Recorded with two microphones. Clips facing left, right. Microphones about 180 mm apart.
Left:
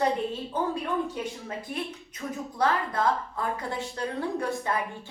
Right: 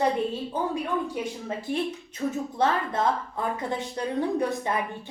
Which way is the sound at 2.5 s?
25° right (ahead or behind).